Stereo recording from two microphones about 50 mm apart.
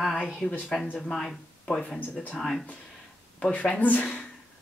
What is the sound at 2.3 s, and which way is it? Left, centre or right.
Speech, centre.